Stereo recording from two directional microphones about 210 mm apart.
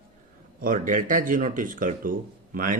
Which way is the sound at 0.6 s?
40° right (ahead or behind).